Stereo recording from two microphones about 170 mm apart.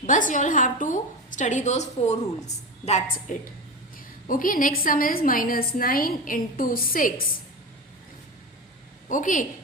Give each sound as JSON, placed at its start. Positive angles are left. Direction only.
{"t": 0.0, "sound": "a woman's voice", "side_deg": 50}
{"t": 4.3, "sound": "a woman's voice", "side_deg": 55}
{"t": 9.0, "sound": "a woman's voice", "side_deg": 50}